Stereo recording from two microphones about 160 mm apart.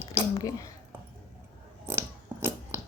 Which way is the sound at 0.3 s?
20° left (ahead or behind).